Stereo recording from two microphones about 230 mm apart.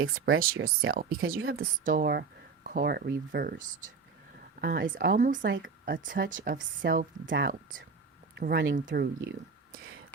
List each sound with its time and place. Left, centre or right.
0.3 s speech: right
5.5 s speech: right
6.3 s speech: right